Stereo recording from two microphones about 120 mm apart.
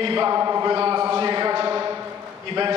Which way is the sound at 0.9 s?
30° right (ahead or behind).